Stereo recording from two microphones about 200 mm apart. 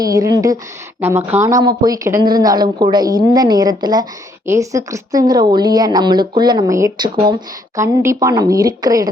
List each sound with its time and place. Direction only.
0.0 s a woman's voice: 20° right (ahead or behind)